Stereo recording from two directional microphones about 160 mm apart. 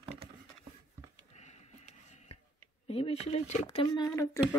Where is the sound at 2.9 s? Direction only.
40° left (ahead or behind).